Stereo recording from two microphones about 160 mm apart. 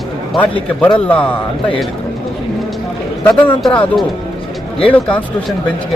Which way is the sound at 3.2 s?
5° left (ahead or behind).